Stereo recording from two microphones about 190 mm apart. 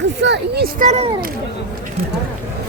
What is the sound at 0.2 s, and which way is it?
Speech, 65° right (ahead or behind).